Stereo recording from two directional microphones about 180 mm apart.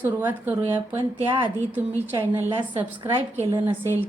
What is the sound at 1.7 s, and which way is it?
A woman's voice, 10° right (ahead or behind).